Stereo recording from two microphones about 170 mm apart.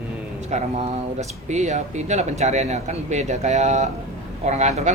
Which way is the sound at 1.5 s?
45° right (ahead or behind).